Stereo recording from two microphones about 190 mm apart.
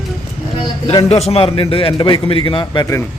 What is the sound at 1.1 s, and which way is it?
A man's voice, 35° left (ahead or behind).